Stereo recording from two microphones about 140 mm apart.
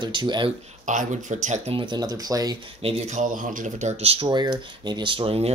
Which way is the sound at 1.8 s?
30° right (ahead or behind).